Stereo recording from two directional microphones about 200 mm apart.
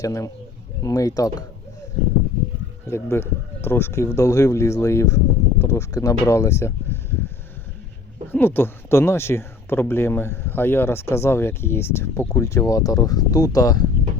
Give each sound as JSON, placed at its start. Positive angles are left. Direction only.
{"t": 0.0, "sound": "speech", "side_deg": 15}
{"t": 2.9, "sound": "a man's voice", "side_deg": 10}
{"t": 8.3, "sound": "speech", "side_deg": 10}